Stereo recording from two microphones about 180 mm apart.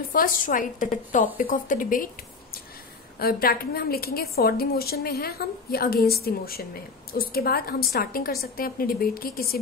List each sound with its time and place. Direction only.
0.1 s a woman's voice: 50° left (ahead or behind)
3.2 s a woman's voice: 55° left (ahead or behind)